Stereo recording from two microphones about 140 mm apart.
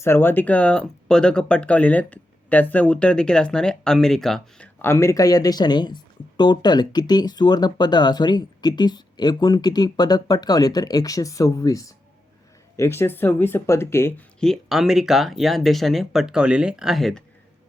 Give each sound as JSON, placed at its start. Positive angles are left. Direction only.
{"t": 0.0, "sound": "speech", "side_deg": 15}
{"t": 4.8, "sound": "speech", "side_deg": 20}
{"t": 14.3, "sound": "speech", "side_deg": 5}